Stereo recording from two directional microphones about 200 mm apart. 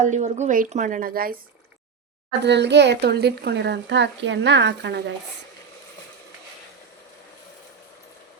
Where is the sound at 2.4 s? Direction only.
60° right (ahead or behind).